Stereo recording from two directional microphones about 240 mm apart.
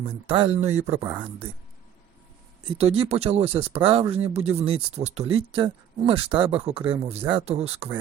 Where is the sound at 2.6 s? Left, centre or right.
Right.